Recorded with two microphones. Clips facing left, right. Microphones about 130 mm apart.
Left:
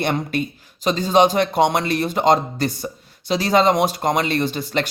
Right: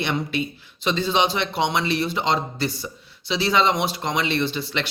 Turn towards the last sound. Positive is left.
turn(degrees=45)  # may be behind; listen again after turning